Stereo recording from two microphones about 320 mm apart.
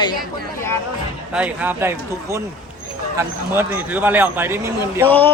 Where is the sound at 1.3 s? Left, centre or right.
Centre.